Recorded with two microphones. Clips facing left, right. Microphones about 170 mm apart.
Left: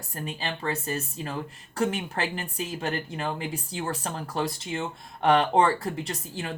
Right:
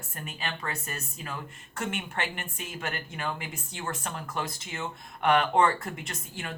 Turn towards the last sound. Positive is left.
turn(degrees=30)  # may be behind; listen again after turning